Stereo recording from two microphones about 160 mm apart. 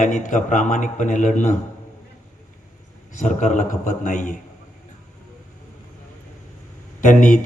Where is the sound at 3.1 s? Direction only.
50° left (ahead or behind).